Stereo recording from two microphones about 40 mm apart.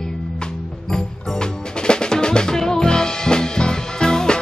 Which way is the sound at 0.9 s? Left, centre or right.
Left.